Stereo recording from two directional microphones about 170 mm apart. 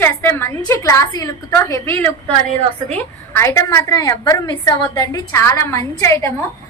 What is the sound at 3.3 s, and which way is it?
A woman's voice, 15° left (ahead or behind).